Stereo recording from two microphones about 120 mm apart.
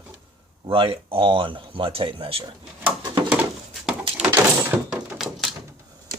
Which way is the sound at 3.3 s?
15° right (ahead or behind).